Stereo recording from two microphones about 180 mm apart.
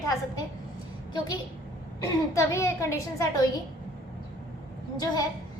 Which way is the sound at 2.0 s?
15° left (ahead or behind).